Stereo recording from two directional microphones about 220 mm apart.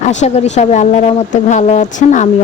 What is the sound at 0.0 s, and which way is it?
Speech, 35° left (ahead or behind).